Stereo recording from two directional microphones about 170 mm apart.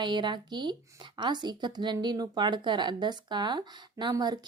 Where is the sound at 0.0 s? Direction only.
25° right (ahead or behind).